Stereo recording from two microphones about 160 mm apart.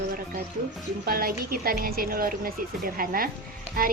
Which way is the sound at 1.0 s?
65° right (ahead or behind).